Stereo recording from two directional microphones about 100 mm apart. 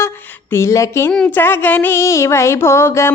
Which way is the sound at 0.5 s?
30° left (ahead or behind).